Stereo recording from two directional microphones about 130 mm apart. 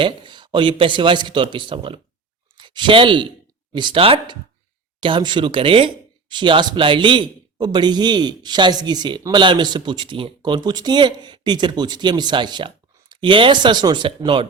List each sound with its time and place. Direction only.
0.0 s speech: 40° right (ahead or behind)